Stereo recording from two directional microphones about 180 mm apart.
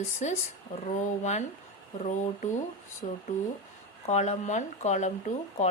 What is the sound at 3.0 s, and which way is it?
Speech, 35° left (ahead or behind).